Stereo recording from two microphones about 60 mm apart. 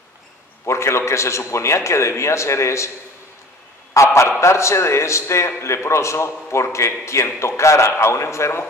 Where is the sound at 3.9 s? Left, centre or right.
Left.